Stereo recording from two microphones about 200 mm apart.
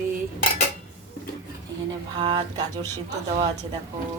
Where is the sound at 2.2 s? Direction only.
25° right (ahead or behind).